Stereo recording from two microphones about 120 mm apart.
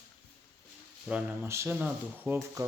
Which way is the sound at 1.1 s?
10° right (ahead or behind).